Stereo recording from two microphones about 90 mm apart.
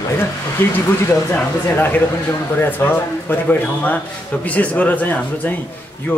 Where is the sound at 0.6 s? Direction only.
25° left (ahead or behind).